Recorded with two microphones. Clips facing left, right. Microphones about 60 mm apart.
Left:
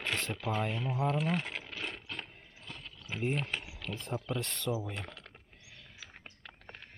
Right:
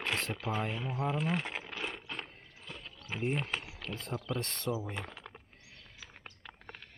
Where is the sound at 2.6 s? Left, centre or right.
Centre.